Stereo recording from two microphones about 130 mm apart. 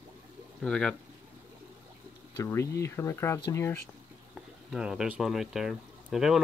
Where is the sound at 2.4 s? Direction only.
20° left (ahead or behind).